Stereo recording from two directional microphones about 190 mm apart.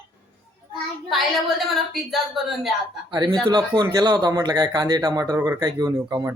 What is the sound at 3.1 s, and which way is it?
A man's voice, 25° right (ahead or behind).